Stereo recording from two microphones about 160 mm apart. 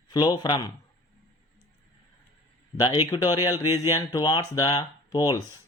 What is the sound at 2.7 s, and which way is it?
Speech, 25° left (ahead or behind).